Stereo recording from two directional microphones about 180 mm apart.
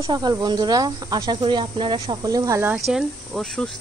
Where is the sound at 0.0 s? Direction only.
20° right (ahead or behind).